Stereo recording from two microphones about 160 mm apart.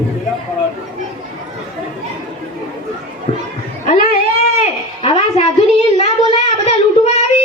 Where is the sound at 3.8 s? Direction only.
65° left (ahead or behind).